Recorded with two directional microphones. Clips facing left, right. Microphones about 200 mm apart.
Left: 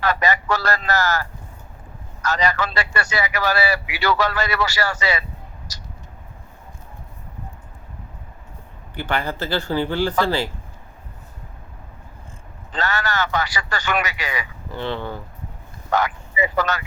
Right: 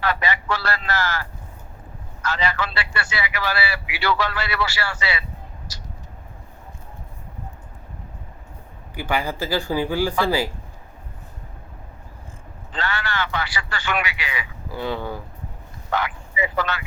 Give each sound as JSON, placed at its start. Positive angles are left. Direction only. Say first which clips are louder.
{"t": 0.0, "sound": "a man's voice", "louder": "left 3 dB", "side_deg": 45}
{"t": 5.7, "sound": "a sound", "louder": "right 1 dB", "side_deg": 40}
{"t": 9.0, "sound": "speech", "louder": "even", "side_deg": -10}
{"t": 12.7, "sound": "a man's voice", "louder": "left 3 dB", "side_deg": 40}
{"t": 14.7, "sound": "speech", "louder": "even", "side_deg": -10}
{"t": 15.9, "sound": "speech", "louder": "left 4 dB", "side_deg": 40}